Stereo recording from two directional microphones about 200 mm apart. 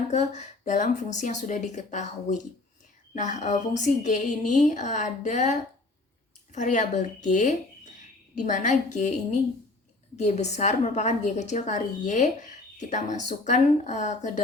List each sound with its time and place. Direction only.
0.1 s a woman's voice: 35° left (ahead or behind)